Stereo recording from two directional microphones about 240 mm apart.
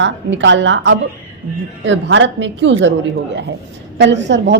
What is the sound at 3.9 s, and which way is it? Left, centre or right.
Speech, right.